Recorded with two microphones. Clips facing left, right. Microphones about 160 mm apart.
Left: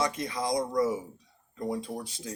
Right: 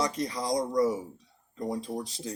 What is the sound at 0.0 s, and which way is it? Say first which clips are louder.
Speech: even; 35° right (ahead or behind).